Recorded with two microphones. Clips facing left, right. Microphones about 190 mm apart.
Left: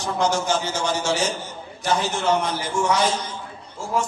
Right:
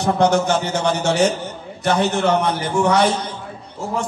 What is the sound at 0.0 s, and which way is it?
A man's voice, 60° right (ahead or behind).